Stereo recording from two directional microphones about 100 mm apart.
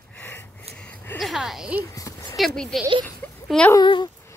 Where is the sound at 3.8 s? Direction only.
50° left (ahead or behind).